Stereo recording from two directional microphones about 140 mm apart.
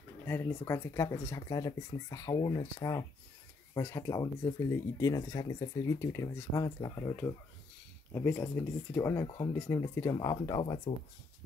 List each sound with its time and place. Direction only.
0.3 s speech: 15° left (ahead or behind)
8.1 s speech: 15° left (ahead or behind)
10.1 s speech: 30° left (ahead or behind)
10.9 s speech: 55° left (ahead or behind)